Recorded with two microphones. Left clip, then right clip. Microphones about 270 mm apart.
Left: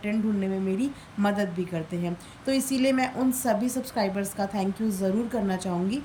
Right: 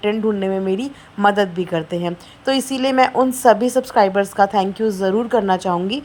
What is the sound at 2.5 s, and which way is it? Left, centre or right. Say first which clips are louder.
A woman's voice: right 7 dB; centre.